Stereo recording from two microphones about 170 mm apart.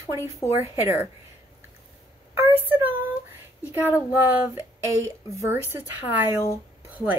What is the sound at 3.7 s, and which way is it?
A woman's voice, 10° right (ahead or behind).